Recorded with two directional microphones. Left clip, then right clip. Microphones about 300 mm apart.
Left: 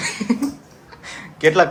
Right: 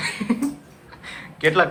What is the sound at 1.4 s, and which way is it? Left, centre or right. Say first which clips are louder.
Speech: left 4 dB; centre.